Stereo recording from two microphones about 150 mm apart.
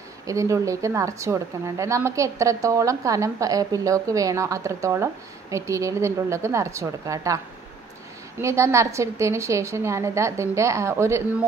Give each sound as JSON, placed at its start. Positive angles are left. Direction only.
{"t": 0.3, "sound": "a woman's voice", "side_deg": -20}
{"t": 8.4, "sound": "a woman's voice", "side_deg": -20}